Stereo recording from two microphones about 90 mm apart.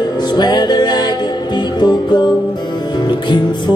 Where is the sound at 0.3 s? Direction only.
55° left (ahead or behind).